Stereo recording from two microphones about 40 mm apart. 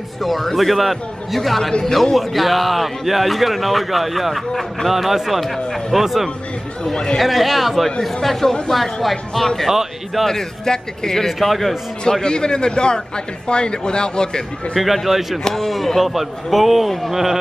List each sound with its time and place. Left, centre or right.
0.2 s a man's voice: centre
1.7 s a man's voice: centre
2.1 s a man's voice: centre
4.5 s a man's voice: centre
4.8 s a man's voice: centre
7.2 s a man's voice: centre
9.7 s a sound: centre
10.2 s a man's voice: centre
11.3 s a man's voice: centre
12.0 s a man's voice: left
14.8 s a man's voice: centre
15.4 s a man's voice: centre